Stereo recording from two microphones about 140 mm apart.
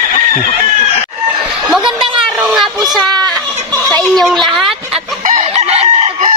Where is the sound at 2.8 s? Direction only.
30° right (ahead or behind).